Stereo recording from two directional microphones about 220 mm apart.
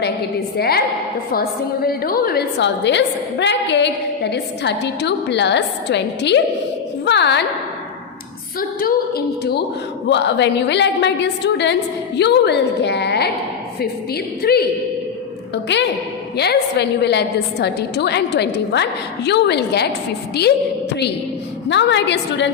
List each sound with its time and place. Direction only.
0.0 s a woman's voice: 45° left (ahead or behind)
7.0 s a sound: 50° left (ahead or behind)
8.8 s a woman's voice: 45° left (ahead or behind)
21.7 s a woman's voice: 55° left (ahead or behind)